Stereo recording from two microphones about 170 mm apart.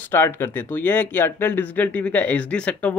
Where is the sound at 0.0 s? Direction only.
15° left (ahead or behind).